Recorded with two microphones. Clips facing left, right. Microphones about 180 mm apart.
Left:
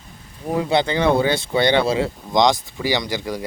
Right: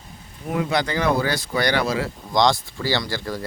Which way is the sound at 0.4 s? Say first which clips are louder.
Left 4 dB; 30° left (ahead or behind).